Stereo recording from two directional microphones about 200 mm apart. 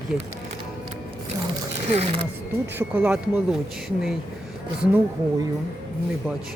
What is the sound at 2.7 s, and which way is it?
Speech, 5° right (ahead or behind).